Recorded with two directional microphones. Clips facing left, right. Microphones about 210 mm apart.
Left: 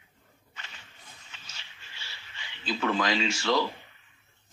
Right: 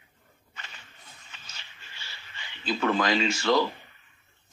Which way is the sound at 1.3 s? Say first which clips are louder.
Right 1 dB; 50° right (ahead or behind).